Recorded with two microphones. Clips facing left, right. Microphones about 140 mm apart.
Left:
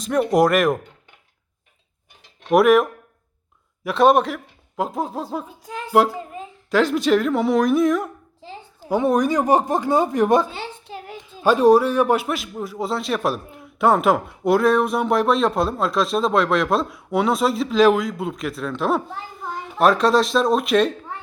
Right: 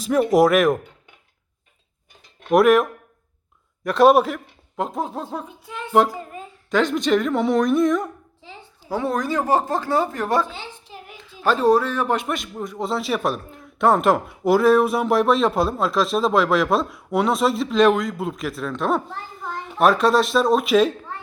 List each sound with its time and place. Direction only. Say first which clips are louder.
0.0 s speech: right 1 dB; centre (ahead or behind)
2.5 s speech: left 1 dB; centre (ahead or behind)
5.5 s a sound: left 1 dB; 40° left (ahead or behind)
6.7 s speech: left 2 dB; 5° left (ahead or behind)
8.9 s speech: left 5 dB; 20° left (ahead or behind); by 20.9 s centre (ahead or behind)